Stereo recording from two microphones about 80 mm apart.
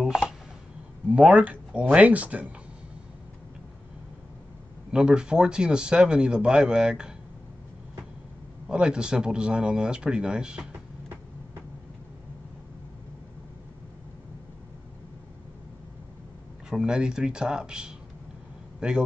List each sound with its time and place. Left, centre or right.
0.0 s a sound: centre
1.1 s speech: centre
4.9 s speech: centre
8.6 s speech: centre
16.6 s speech: centre